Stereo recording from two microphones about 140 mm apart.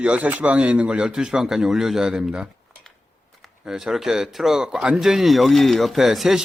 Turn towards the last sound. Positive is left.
turn(degrees=0)  # may be behind; listen again after turning